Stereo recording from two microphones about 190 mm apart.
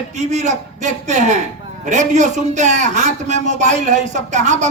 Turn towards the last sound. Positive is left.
turn(degrees=-40)  # may be behind; listen again after turning